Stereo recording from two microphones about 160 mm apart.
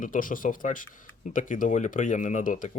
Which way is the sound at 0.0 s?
55° left (ahead or behind).